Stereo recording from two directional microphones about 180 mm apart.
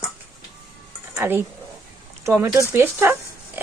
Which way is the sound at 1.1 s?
15° right (ahead or behind).